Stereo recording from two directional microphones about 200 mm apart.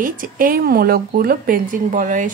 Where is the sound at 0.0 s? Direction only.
45° right (ahead or behind).